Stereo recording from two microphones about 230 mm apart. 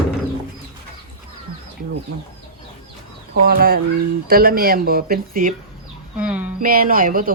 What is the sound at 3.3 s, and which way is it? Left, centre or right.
A woman's voice, right.